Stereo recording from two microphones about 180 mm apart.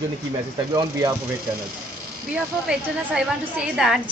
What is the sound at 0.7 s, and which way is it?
Speech, 20° right (ahead or behind).